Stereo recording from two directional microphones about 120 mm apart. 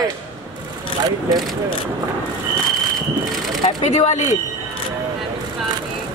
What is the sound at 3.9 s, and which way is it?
Speech, 70° left (ahead or behind).